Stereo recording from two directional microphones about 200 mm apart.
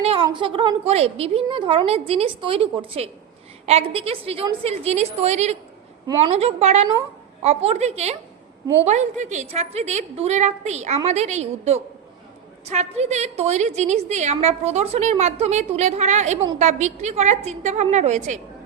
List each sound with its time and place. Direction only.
0.0 s a woman's voice: 25° right (ahead or behind)